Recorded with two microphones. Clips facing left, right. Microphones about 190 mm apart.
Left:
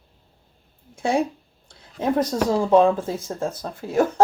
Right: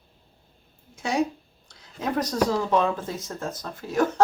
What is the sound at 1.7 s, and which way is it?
Speech, 25° left (ahead or behind).